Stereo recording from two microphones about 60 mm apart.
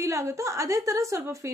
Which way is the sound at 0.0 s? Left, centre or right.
Right.